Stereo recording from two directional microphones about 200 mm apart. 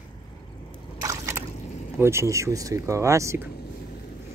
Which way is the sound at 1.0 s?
15° right (ahead or behind).